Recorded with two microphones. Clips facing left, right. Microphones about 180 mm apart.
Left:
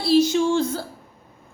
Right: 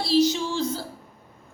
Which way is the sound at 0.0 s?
55° left (ahead or behind).